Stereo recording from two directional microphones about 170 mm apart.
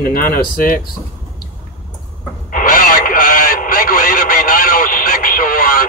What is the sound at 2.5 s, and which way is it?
Radio, 55° left (ahead or behind).